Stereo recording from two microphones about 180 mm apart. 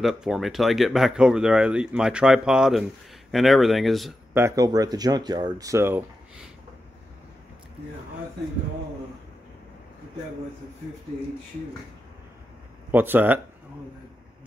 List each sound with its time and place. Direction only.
0.0 s speech: centre (ahead or behind)
4.3 s speech: 15° right (ahead or behind)
12.9 s speech: 10° right (ahead or behind)